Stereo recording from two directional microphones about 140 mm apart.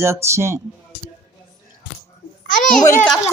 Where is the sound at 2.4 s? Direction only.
65° left (ahead or behind).